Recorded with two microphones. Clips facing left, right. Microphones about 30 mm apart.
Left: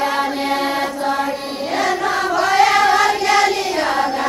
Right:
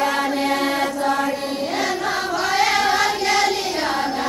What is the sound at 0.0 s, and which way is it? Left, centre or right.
Chant, centre.